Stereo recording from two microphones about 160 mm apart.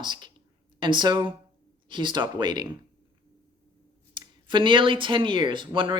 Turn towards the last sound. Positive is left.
turn(degrees=-30)  # may be behind; listen again after turning